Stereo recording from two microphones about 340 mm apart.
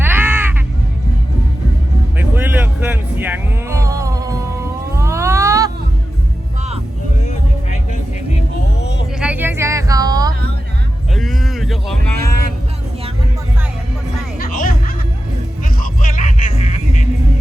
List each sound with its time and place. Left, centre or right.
0.0 s caw: centre
2.1 s music: centre
4.9 s a sound: centre
9.1 s music: centre
11.1 s a sound: centre
14.3 s music: left
16.0 s music: left